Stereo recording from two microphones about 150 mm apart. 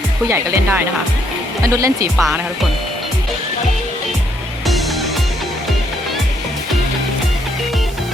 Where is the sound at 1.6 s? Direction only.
20° right (ahead or behind).